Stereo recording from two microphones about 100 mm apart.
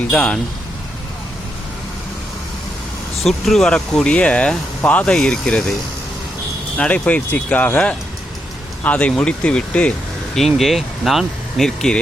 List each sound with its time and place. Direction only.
0.1 s speech: 10° left (ahead or behind)
3.2 s speech: 5° left (ahead or behind)
6.7 s speech: 15° left (ahead or behind)
10.3 s speech: centre (ahead or behind)